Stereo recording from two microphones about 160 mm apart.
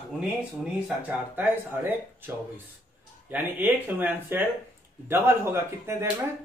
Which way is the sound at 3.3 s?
10° right (ahead or behind).